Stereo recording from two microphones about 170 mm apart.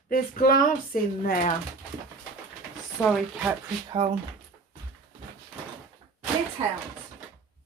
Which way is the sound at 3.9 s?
30° right (ahead or behind).